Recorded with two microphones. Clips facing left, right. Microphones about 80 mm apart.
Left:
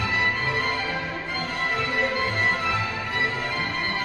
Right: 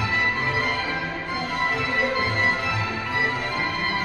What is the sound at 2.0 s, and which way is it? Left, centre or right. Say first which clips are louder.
Music: right 2 dB; centre.